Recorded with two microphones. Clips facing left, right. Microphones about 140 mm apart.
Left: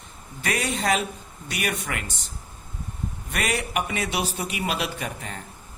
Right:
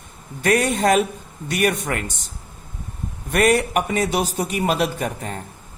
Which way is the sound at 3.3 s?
50° right (ahead or behind).